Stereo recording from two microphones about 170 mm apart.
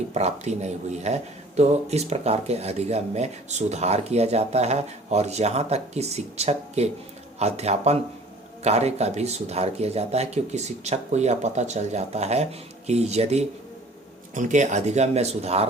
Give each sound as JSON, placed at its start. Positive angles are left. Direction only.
{"t": 0.1, "sound": "speech", "side_deg": -40}